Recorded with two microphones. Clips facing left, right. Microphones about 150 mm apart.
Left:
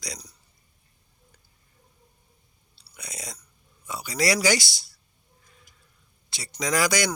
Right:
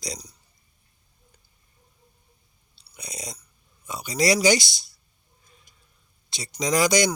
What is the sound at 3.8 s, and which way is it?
Speech, 20° right (ahead or behind).